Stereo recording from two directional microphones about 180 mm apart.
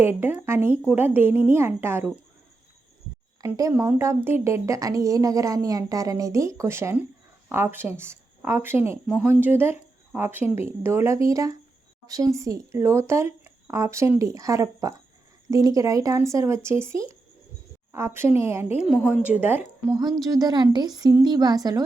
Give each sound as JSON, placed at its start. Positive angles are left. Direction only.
{"t": 0.0, "sound": "speech", "side_deg": -10}
{"t": 3.4, "sound": "speech", "side_deg": -15}
{"t": 18.8, "sound": "speech", "side_deg": -5}
{"t": 20.0, "sound": "a woman's voice", "side_deg": -20}